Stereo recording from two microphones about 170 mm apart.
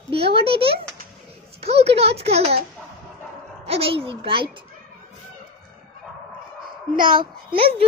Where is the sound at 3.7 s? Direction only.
35° right (ahead or behind).